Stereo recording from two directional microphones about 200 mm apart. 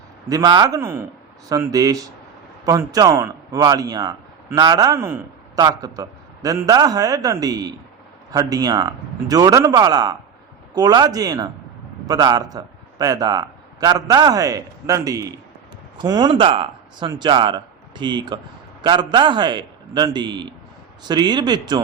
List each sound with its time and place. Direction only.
0.3 s a man's voice: 20° right (ahead or behind)